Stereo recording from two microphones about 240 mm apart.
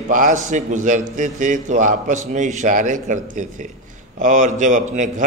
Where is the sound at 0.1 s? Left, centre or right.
Right.